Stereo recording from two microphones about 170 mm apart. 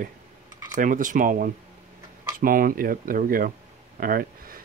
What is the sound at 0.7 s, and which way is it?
Speech, 50° right (ahead or behind).